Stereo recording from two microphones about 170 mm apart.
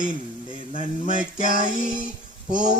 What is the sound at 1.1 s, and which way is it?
Speech, 50° left (ahead or behind).